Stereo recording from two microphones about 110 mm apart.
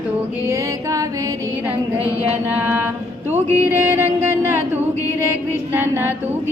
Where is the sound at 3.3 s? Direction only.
20° right (ahead or behind).